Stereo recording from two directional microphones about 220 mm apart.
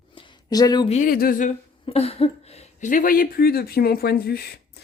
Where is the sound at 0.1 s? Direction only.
20° left (ahead or behind).